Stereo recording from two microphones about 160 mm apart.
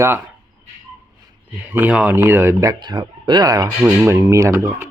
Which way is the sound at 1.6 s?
10° right (ahead or behind).